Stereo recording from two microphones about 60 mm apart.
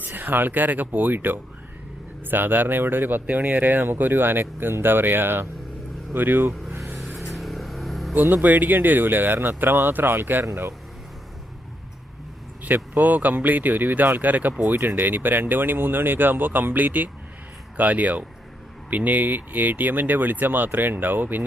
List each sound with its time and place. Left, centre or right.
0.0 s speech: right
6.7 s vehicle: right
7.3 s vehicle: centre
8.1 s speech: right
12.6 s speech: right